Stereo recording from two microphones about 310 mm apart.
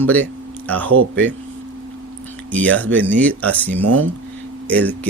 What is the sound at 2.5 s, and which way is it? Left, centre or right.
Speech, centre.